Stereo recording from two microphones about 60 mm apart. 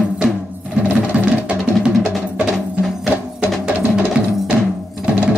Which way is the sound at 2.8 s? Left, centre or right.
Centre.